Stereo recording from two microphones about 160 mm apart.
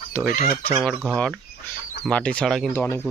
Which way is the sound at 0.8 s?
5° right (ahead or behind).